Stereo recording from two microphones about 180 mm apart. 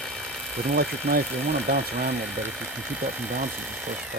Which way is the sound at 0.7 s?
65° right (ahead or behind).